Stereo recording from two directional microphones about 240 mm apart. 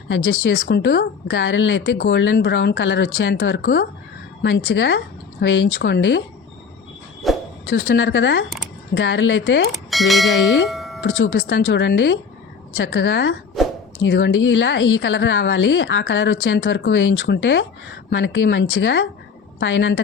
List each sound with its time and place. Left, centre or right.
0.1 s speech: left
7.2 s a sound: centre
7.7 s speech: left
9.7 s speech: centre
10.7 s music: centre
11.0 s speech: left
13.6 s a sound: centre
14.0 s a woman's voice: left